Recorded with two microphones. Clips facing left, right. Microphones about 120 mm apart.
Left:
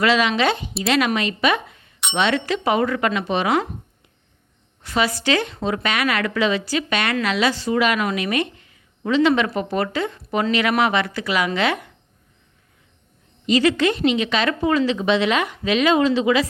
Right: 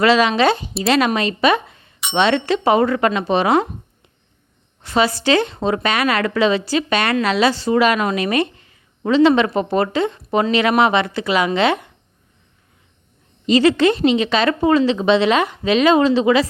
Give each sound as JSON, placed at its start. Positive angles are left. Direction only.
{"t": 0.0, "sound": "a woman's voice", "side_deg": -35}
{"t": 4.8, "sound": "a woman's voice", "side_deg": -30}
{"t": 13.5, "sound": "a woman's voice", "side_deg": -30}